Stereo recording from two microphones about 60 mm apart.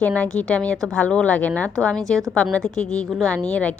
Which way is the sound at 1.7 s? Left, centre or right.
Centre.